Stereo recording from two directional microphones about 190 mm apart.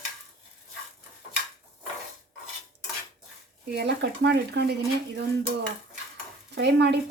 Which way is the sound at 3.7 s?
60° right (ahead or behind).